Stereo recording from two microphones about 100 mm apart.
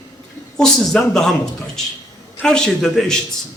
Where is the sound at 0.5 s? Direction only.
5° left (ahead or behind).